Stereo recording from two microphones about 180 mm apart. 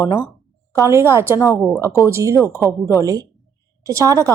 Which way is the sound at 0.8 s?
15° right (ahead or behind).